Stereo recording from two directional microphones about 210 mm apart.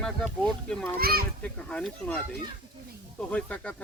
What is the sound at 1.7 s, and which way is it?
Speech, 5° left (ahead or behind).